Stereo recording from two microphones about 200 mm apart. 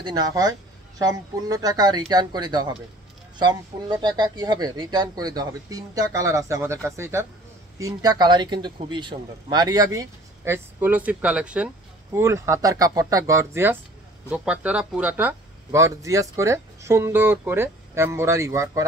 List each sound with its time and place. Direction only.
0.0 s speech: 20° right (ahead or behind)